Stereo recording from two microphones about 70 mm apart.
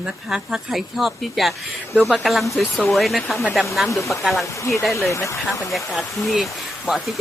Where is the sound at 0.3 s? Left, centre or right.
Centre.